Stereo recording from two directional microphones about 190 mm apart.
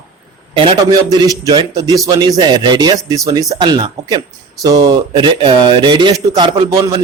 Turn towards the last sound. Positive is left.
turn(degrees=-15)  # may be behind; listen again after turning